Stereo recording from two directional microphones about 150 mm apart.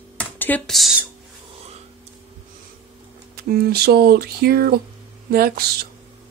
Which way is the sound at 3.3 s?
90° right.